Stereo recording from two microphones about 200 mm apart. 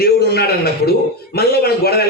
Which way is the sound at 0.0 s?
55° left (ahead or behind).